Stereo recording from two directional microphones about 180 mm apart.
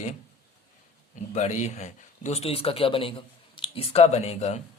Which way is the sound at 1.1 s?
40° left (ahead or behind).